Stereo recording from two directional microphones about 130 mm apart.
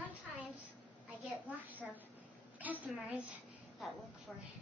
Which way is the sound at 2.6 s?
10° right (ahead or behind).